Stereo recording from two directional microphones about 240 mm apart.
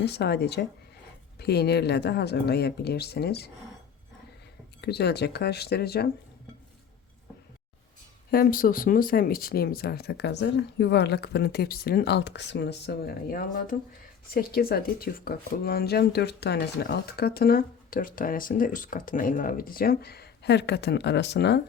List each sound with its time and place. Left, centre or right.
0.0 s speech: left
4.8 s speech: left
8.3 s speech: left